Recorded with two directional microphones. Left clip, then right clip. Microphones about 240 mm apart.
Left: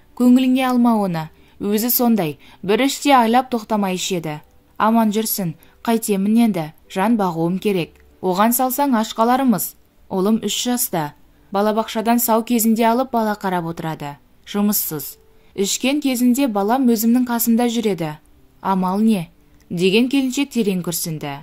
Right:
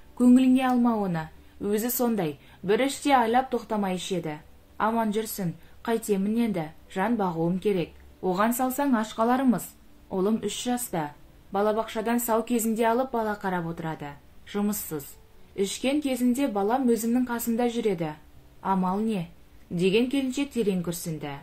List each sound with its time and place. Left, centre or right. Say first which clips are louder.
0.2 s speech: left 5 dB; left